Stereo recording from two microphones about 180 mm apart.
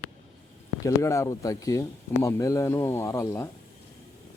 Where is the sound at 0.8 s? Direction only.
15° left (ahead or behind).